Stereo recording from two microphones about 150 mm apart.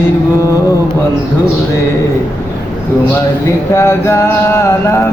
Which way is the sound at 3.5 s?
20° left (ahead or behind).